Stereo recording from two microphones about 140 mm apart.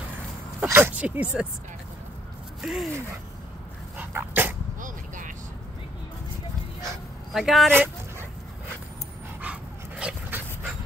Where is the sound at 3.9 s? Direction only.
15° right (ahead or behind).